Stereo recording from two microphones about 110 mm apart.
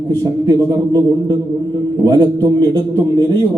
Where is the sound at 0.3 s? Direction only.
35° right (ahead or behind).